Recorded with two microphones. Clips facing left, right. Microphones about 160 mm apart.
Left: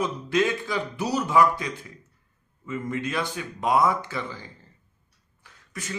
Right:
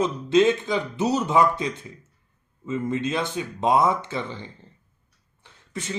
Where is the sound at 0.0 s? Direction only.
25° right (ahead or behind).